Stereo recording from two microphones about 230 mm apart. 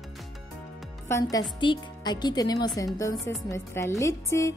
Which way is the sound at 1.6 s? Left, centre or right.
Centre.